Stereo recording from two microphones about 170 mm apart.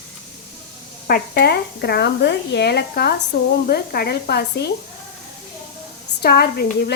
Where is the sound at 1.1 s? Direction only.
70° left (ahead or behind).